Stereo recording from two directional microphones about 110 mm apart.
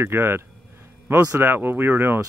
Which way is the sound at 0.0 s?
20° right (ahead or behind).